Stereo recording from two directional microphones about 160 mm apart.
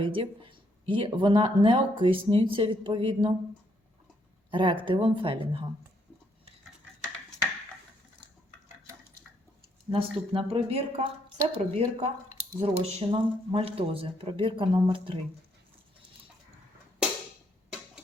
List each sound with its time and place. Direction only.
0.0 s speech: 35° right (ahead or behind)
4.5 s speech: 30° right (ahead or behind)
9.9 s speech: 35° right (ahead or behind)